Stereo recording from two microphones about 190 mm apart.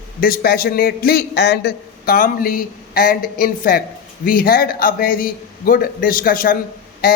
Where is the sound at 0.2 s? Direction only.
50° left (ahead or behind).